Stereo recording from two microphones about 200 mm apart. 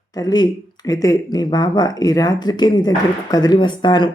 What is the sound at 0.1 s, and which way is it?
Speech, 20° left (ahead or behind).